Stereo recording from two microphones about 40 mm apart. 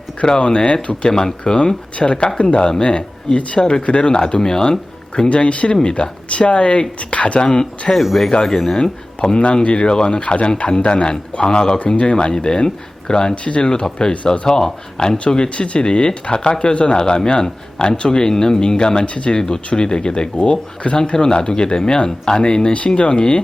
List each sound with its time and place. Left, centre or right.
0.2 s speech: left
5.3 s speech: left
8.0 s speech: centre
8.8 s speech: left
13.3 s speech: left
15.5 s speech: left
19.3 s speech: centre